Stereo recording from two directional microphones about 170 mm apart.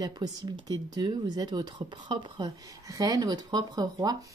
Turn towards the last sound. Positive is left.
turn(degrees=-20)  # may be behind; listen again after turning